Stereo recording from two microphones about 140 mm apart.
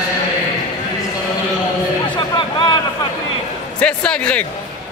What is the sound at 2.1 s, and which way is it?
Music, 35° left (ahead or behind).